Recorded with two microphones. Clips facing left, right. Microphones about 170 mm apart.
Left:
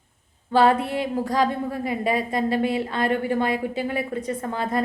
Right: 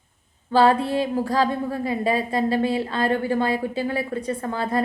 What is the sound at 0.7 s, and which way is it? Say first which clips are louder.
Speech: right 2 dB; 30° right (ahead or behind).